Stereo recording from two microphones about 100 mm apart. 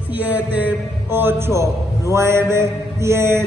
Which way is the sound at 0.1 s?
15° right (ahead or behind).